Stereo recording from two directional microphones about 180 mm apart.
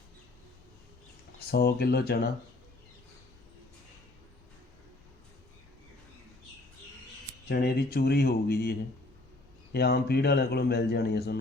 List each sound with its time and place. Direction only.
1.5 s speech: 60° left (ahead or behind)
7.4 s speech: 60° left (ahead or behind)
9.7 s speech: 60° left (ahead or behind)